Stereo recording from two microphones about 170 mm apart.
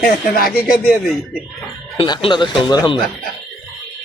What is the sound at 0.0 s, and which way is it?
Speech, 60° left (ahead or behind).